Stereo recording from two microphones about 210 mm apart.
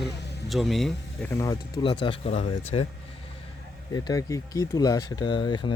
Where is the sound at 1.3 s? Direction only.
15° left (ahead or behind).